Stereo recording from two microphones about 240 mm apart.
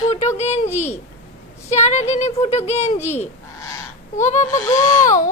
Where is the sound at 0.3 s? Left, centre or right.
Left.